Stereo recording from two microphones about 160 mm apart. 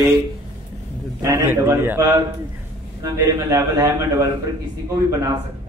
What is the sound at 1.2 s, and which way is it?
A man's voice, 20° right (ahead or behind).